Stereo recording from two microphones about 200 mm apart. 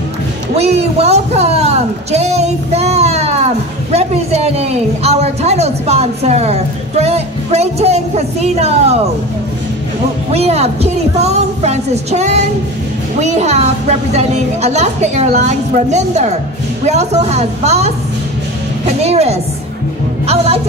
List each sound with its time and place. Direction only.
0.6 s a man's voice: 30° right (ahead or behind)
10.3 s a woman's voice: 30° right (ahead or behind)
18.9 s a woman's voice: 30° right (ahead or behind)